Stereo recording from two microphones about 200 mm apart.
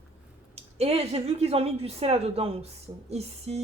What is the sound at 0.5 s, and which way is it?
Speech, 30° right (ahead or behind).